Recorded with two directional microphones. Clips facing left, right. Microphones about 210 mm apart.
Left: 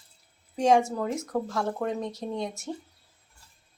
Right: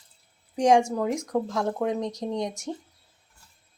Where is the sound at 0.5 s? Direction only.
15° right (ahead or behind).